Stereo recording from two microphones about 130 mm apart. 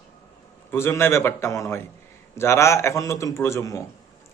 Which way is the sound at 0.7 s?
20° left (ahead or behind).